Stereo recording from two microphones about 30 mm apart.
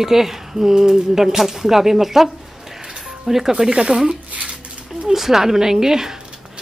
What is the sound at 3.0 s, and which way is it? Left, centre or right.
Music, centre.